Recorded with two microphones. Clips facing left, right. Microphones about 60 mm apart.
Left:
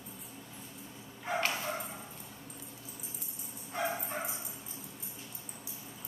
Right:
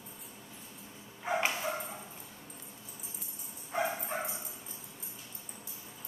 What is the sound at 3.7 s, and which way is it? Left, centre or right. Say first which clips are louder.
Bow-wow: right 2 dB; centre.